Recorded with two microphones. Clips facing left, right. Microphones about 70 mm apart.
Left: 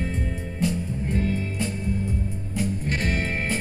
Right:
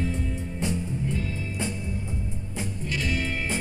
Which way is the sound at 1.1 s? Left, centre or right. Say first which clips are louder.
Left 6 dB; left.